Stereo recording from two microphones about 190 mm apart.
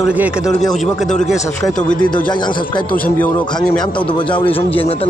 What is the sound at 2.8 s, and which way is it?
Speech, 50° left (ahead or behind).